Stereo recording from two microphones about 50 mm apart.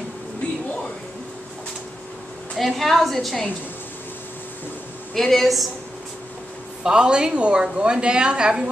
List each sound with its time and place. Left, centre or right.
2.5 s a woman's voice: centre
5.1 s a woman's voice: centre
6.8 s a woman's voice: centre